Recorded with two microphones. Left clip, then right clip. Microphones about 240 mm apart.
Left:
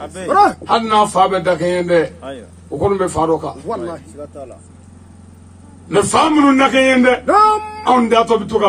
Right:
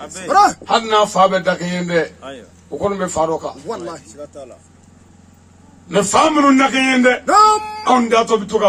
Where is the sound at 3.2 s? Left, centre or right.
Right.